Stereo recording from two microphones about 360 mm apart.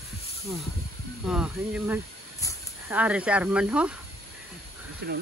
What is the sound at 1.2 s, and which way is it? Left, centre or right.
Speech, centre.